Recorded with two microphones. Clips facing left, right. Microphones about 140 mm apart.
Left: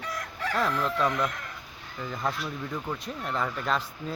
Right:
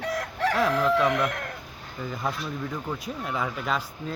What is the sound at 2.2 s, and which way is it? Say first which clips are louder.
Speech: right 1 dB; 5° right (ahead or behind).